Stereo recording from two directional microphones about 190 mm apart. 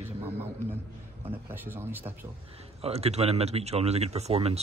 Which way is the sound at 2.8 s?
35° right (ahead or behind).